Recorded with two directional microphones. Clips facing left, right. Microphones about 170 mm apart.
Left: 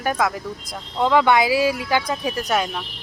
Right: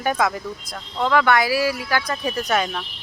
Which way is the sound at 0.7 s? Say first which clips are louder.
Left 2 dB; 20° left (ahead or behind).